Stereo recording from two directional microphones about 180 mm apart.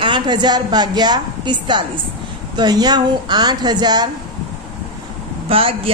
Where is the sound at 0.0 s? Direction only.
25° right (ahead or behind).